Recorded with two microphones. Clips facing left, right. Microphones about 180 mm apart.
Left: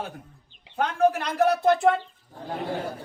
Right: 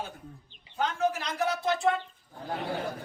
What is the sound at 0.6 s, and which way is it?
Bird, 60° left (ahead or behind).